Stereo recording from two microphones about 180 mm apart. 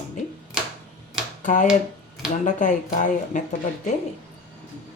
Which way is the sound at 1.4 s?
45° left (ahead or behind).